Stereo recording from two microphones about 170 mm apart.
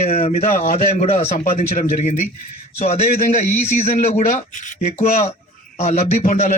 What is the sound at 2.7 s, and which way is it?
Speech, 40° left (ahead or behind).